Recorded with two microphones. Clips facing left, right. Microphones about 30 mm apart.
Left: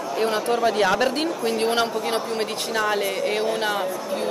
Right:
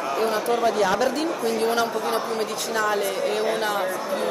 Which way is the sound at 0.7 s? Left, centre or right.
Left.